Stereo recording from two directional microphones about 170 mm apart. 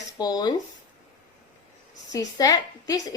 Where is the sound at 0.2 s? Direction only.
25° left (ahead or behind).